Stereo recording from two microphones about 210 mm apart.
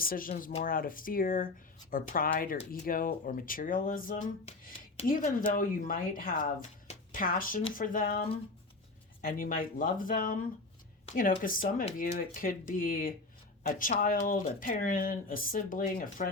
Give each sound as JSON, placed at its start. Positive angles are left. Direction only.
{"t": 0.0, "sound": "speech", "side_deg": 40}